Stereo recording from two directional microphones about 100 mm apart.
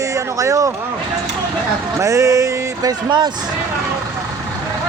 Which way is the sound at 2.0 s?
30° right (ahead or behind).